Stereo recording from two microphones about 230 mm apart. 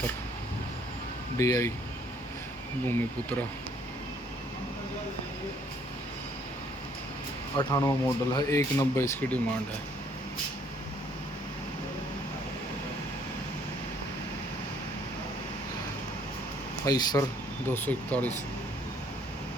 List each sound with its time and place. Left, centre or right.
1.4 s speech: centre
2.8 s speech: centre
7.5 s speech: centre
16.8 s speech: centre